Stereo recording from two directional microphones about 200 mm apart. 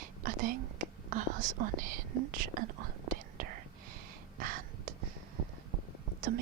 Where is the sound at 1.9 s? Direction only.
45° right (ahead or behind).